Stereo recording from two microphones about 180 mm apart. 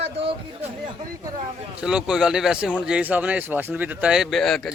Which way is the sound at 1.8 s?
5° right (ahead or behind).